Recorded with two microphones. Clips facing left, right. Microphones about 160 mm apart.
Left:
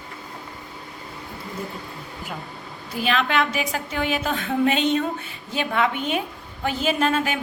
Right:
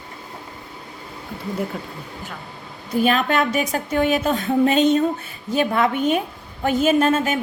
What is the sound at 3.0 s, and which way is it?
A woman's voice, 45° right (ahead or behind).